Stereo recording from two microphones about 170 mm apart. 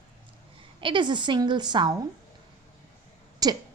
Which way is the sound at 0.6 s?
30° right (ahead or behind).